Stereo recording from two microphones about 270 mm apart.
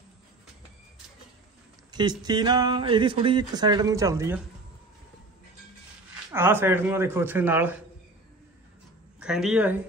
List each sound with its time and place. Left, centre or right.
1.9 s speech: centre
6.3 s speech: centre
9.2 s speech: centre